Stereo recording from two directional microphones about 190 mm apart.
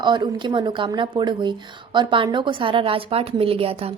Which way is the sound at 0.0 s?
25° right (ahead or behind).